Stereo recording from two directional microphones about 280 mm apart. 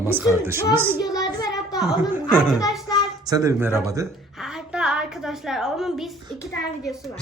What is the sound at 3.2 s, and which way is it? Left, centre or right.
A woman's voice, centre.